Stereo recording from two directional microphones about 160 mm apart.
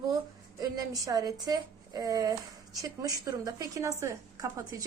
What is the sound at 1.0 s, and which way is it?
A woman's voice, 20° right (ahead or behind).